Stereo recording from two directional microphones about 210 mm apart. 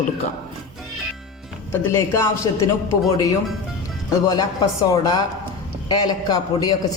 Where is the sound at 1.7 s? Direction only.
15° left (ahead or behind).